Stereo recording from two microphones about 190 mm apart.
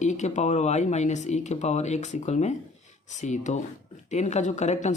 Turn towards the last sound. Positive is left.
turn(degrees=40)  # may be behind; listen again after turning